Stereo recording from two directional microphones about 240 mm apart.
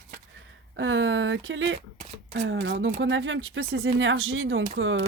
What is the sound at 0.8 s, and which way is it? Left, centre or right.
Speech, right.